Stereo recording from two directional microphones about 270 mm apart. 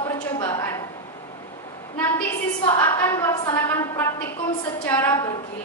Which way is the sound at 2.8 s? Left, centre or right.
Centre.